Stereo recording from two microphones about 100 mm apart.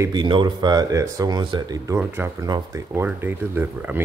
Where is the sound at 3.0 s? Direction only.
20° right (ahead or behind).